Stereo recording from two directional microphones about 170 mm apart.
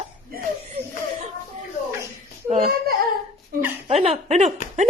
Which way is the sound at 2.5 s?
55° right (ahead or behind).